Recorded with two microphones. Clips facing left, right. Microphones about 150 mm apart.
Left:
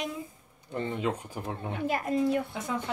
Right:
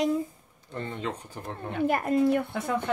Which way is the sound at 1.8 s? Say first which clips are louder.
Right 4 dB; 55° right (ahead or behind).